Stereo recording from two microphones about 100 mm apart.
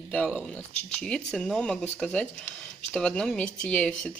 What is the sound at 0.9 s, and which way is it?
A woman's voice, 10° left (ahead or behind).